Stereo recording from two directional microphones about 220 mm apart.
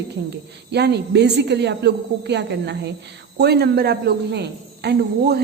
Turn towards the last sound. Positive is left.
turn(degrees=-50)  # may be behind; listen again after turning